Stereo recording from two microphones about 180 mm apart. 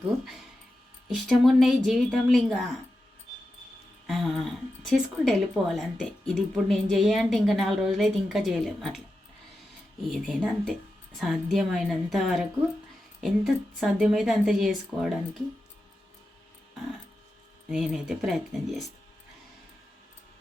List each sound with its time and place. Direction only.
1.0 s a woman's voice: centre (ahead or behind)
4.0 s a woman's voice: centre (ahead or behind)
10.0 s a woman's voice: centre (ahead or behind)
17.7 s a woman's voice: 5° right (ahead or behind)